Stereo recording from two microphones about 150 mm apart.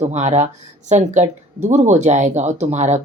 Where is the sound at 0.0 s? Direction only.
50° right (ahead or behind).